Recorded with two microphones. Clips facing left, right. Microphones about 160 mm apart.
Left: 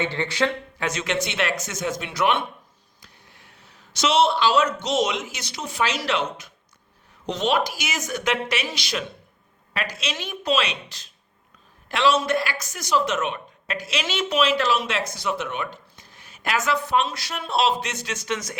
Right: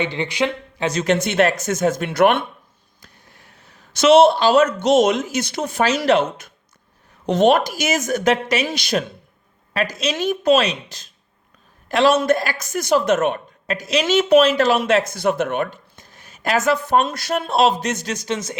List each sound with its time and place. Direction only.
0.0 s speech: 15° right (ahead or behind)
0.9 s speech: 40° right (ahead or behind)